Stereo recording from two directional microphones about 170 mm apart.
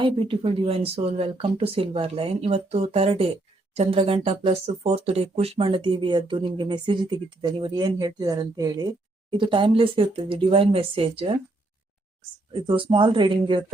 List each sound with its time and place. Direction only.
0.0 s speech: 30° right (ahead or behind)
12.6 s speech: 30° right (ahead or behind)